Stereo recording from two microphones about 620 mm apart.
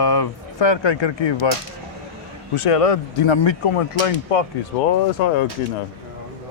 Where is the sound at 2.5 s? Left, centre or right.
Left.